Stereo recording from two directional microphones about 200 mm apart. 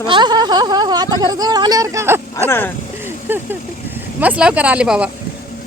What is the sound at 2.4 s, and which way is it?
Speech, 10° left (ahead or behind).